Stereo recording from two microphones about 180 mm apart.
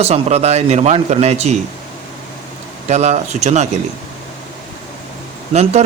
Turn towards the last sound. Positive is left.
turn(degrees=-40)  # may be behind; listen again after turning